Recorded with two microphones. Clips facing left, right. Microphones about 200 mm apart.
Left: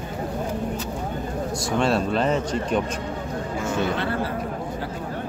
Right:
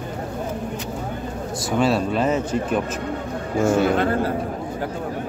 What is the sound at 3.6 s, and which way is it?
Speech, 45° right (ahead or behind).